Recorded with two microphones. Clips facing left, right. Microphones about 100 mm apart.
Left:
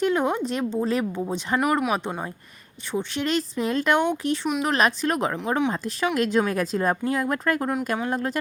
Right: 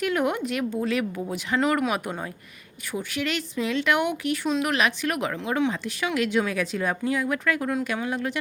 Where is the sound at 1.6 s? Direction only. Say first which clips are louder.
Even; 15° left (ahead or behind).